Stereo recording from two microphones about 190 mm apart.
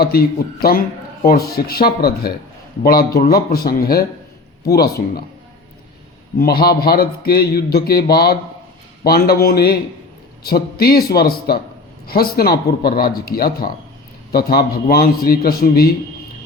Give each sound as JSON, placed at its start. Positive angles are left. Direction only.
{"t": 0.0, "sound": "speech", "side_deg": 55}
{"t": 6.4, "sound": "speech", "side_deg": 55}